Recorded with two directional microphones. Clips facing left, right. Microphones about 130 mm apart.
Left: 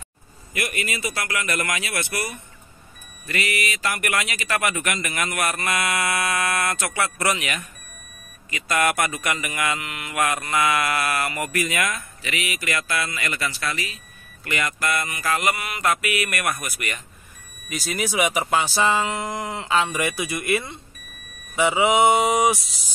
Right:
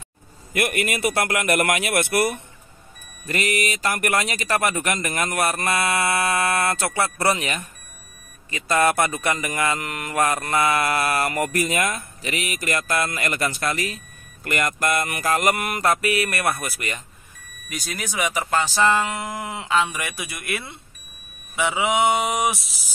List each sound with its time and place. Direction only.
0.5 s a man's voice: 55° right (ahead or behind)
3.3 s speech: 45° right (ahead or behind)
15.8 s speech: 35° right (ahead or behind)
17.6 s speech: 5° left (ahead or behind)